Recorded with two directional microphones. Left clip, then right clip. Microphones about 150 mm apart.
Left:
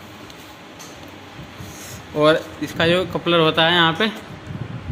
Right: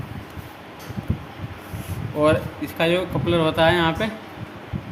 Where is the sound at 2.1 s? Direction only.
50° left (ahead or behind).